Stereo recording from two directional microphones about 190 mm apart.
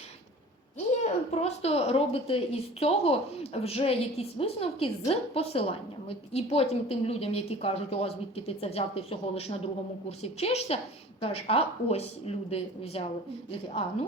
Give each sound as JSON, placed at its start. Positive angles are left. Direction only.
{"t": 1.0, "sound": "a woman's voice", "side_deg": 35}